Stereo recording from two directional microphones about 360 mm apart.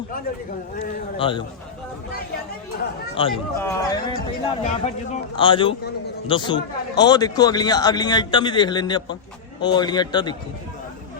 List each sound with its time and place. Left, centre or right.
1.1 s a man's voice: centre
3.2 s a man's voice: centre